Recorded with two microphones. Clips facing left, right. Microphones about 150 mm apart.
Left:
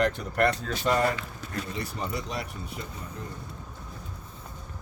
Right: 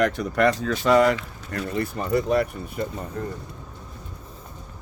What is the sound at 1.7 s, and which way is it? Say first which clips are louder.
Speech: right 12 dB; 55° right (ahead or behind).